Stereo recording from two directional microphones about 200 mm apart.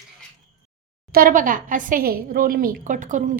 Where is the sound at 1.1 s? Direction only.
45° right (ahead or behind).